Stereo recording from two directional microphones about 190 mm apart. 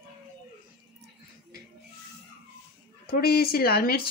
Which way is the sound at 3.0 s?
55° left (ahead or behind).